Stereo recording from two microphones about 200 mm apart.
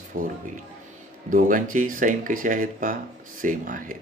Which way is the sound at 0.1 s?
45° right (ahead or behind).